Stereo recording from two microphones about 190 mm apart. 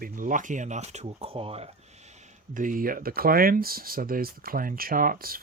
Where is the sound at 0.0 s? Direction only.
45° right (ahead or behind).